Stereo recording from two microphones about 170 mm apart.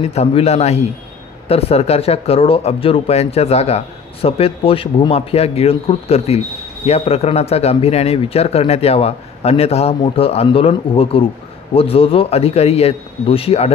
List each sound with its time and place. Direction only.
0.0 s speech: 35° left (ahead or behind)